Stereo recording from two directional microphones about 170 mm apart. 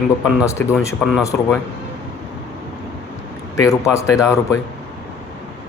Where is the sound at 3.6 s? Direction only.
20° left (ahead or behind).